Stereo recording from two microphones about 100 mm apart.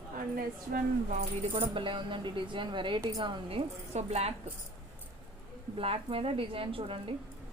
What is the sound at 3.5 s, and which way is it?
Speech, 80° right.